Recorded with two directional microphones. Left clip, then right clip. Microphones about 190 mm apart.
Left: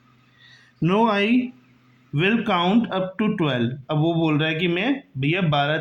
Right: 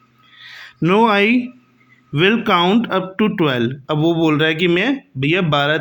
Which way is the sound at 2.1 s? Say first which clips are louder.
Right 6 dB; 35° right (ahead or behind).